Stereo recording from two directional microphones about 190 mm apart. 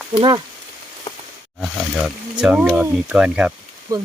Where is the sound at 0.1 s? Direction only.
25° right (ahead or behind).